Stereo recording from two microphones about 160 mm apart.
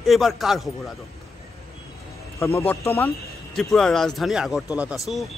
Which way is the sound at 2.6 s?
15° left (ahead or behind).